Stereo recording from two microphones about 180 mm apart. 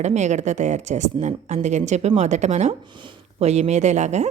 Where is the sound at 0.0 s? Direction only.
40° right (ahead or behind).